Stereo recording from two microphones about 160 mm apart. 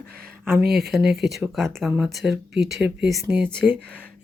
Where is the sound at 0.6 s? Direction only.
75° right (ahead or behind).